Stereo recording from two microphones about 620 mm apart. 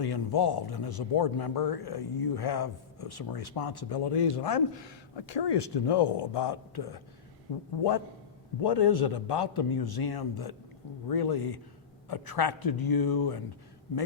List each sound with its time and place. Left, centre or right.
0.0 s speech: left
8.6 s speech: left